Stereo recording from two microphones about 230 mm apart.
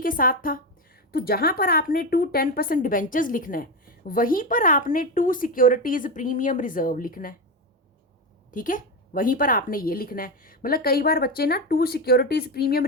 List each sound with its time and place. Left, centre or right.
0.0 s a woman's voice: left
8.4 s a woman's voice: left